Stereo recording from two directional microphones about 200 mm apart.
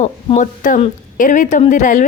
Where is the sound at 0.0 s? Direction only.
40° left (ahead or behind).